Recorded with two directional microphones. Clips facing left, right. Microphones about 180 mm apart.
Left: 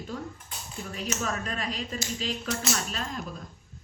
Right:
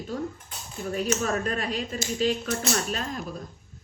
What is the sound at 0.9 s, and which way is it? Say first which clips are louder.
Speech: right 6 dB; 45° right (ahead or behind).